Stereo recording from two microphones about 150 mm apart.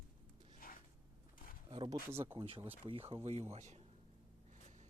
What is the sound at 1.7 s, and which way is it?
Speech, 35° right (ahead or behind).